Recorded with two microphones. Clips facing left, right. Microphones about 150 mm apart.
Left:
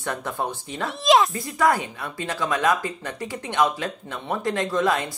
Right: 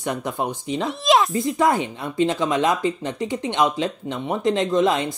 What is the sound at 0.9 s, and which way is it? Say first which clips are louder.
Speech: left 1 dB; centre (ahead or behind).